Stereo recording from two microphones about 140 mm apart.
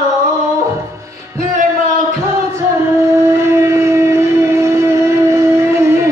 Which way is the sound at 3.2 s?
20° right (ahead or behind).